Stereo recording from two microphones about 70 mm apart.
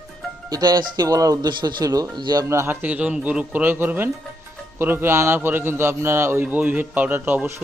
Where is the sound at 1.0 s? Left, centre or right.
Right.